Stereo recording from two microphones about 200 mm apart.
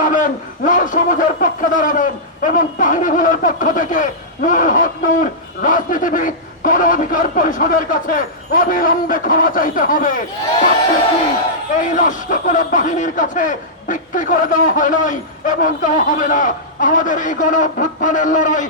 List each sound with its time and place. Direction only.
0.0 s a man's voice: 40° left (ahead or behind)
11.8 s a man's voice: 40° left (ahead or behind)